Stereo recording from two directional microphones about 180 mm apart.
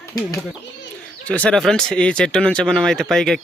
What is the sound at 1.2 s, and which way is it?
Speech, 5° left (ahead or behind).